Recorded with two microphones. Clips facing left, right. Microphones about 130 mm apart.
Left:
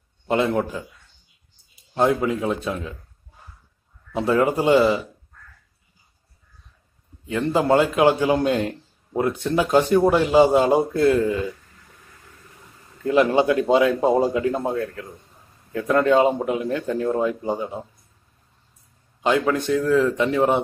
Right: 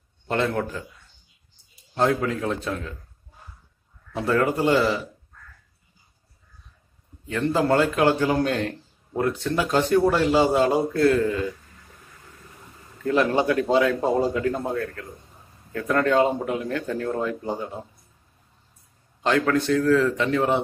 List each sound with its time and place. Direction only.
0.3 s a man's voice: 15° left (ahead or behind)
2.0 s a man's voice: 15° left (ahead or behind)
4.1 s a man's voice: 20° left (ahead or behind)
7.2 s a man's voice: 15° left (ahead or behind)
13.0 s a man's voice: 20° left (ahead or behind)
19.2 s a man's voice: 15° left (ahead or behind)